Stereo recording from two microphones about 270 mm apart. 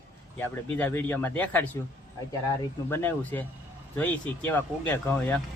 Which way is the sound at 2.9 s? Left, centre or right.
Centre.